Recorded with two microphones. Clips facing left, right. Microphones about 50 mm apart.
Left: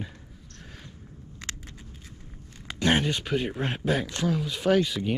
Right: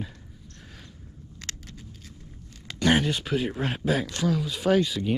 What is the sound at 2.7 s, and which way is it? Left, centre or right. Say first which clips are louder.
Speech: right 1 dB; centre.